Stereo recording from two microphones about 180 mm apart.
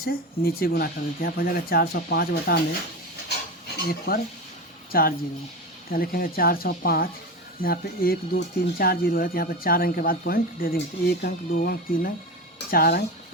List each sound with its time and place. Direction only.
0.0 s speech: 55° left (ahead or behind)
3.8 s speech: 60° left (ahead or behind)